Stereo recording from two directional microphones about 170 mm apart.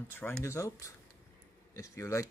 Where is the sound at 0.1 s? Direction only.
10° left (ahead or behind).